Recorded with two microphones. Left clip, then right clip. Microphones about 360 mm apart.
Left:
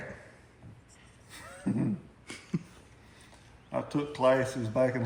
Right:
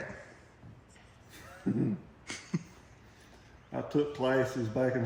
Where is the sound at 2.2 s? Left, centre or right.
Centre.